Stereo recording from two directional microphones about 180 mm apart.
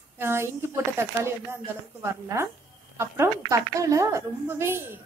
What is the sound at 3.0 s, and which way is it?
A woman's voice, 15° right (ahead or behind).